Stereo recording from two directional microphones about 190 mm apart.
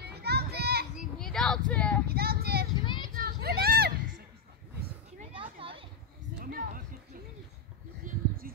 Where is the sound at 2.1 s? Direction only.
55° right (ahead or behind).